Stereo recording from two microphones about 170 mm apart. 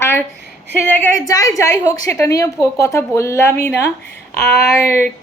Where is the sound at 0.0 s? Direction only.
15° left (ahead or behind).